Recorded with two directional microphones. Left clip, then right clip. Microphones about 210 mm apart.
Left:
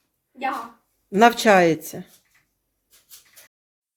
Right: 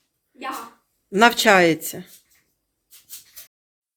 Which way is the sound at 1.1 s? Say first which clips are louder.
Even; centre (ahead or behind).